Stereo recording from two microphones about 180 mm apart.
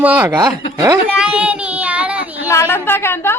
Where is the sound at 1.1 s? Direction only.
5° right (ahead or behind).